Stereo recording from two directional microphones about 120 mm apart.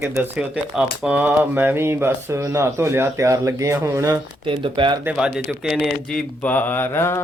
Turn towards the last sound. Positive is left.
turn(degrees=20)  # may be behind; listen again after turning